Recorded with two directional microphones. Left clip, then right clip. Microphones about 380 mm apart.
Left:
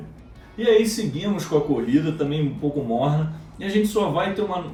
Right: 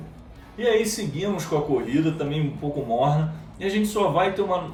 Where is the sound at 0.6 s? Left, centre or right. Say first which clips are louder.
Left 3 dB; centre.